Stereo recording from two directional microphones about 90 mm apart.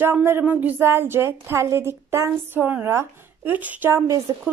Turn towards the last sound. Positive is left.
turn(degrees=-30)  # may be behind; listen again after turning